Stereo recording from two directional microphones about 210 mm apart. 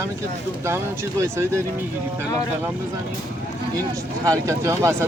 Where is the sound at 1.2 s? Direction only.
15° right (ahead or behind).